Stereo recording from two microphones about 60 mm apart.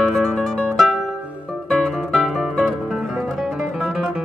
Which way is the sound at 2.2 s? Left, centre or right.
Centre.